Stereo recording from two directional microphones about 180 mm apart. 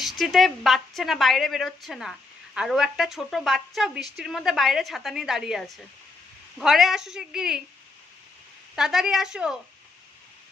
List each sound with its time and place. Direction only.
0.0 s a woman's voice: centre (ahead or behind)
8.7 s a woman's voice: 5° right (ahead or behind)